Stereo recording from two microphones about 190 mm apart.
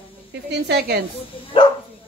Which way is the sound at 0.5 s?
60° right (ahead or behind).